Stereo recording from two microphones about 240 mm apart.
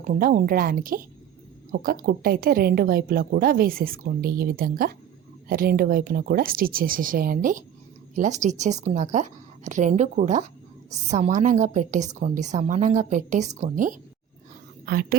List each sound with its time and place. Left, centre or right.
0.1 s a woman's voice: right